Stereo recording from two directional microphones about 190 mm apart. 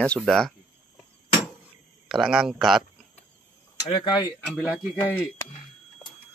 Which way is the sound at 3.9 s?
25° left (ahead or behind).